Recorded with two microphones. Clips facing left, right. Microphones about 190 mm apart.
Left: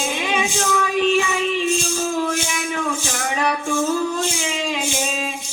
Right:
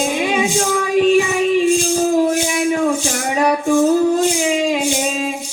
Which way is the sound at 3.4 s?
35° right (ahead or behind).